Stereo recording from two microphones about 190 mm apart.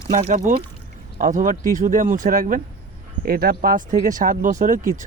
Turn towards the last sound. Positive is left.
turn(degrees=-45)  # may be behind; listen again after turning